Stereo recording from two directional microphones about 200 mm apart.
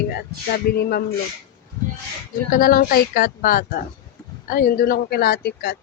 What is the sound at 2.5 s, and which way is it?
Speech, 45° left (ahead or behind).